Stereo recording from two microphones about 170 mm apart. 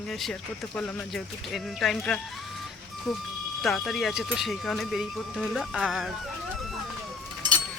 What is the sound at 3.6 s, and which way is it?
Speech, centre (ahead or behind).